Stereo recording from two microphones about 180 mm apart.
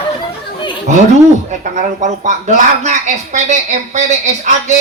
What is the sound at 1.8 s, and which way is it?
Speech, 45° right (ahead or behind).